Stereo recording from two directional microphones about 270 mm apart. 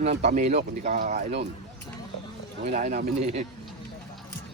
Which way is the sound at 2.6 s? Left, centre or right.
Right.